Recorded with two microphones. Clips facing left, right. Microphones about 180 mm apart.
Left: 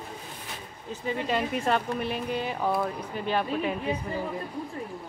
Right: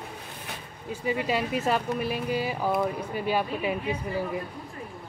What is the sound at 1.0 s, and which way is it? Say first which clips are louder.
Speech: right 1 dB; 10° right (ahead or behind).